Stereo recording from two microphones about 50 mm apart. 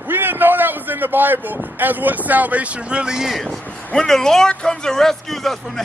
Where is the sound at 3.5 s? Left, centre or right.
Centre.